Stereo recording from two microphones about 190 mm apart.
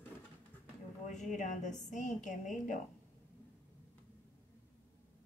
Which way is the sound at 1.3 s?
40° left (ahead or behind).